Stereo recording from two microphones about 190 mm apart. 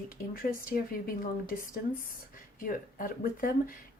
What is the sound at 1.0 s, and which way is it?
Speech, 50° left (ahead or behind).